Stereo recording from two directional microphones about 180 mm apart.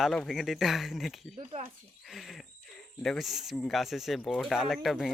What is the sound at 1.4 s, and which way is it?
Speech, 35° right (ahead or behind).